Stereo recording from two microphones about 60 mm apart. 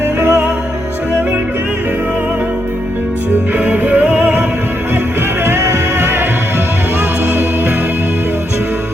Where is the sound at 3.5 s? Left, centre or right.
Right.